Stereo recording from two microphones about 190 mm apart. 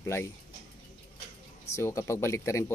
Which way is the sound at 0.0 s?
15° left (ahead or behind).